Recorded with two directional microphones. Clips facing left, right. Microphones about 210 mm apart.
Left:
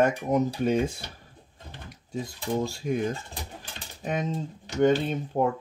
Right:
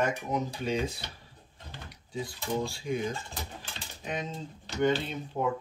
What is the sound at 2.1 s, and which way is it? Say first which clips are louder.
Speech: left 3 dB; 45° left (ahead or behind).